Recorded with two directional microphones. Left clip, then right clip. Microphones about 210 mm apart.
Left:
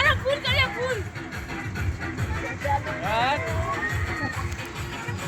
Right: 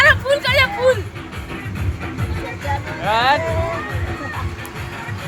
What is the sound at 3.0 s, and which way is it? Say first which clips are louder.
Music: right 9 dB; 50° right (ahead or behind).